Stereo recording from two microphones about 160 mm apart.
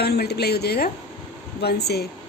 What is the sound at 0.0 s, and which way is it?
A woman's voice, 90° left.